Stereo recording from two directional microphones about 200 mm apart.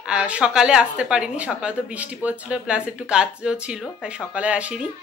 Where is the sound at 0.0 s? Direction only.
5° right (ahead or behind).